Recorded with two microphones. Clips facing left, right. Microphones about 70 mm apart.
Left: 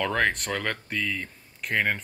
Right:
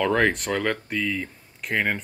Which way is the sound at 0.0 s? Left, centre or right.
Centre.